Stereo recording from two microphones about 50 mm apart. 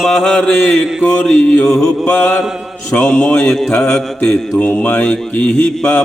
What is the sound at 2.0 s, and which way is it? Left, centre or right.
Speech, left.